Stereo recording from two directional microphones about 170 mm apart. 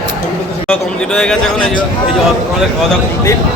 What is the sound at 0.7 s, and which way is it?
Speech, 5° left (ahead or behind).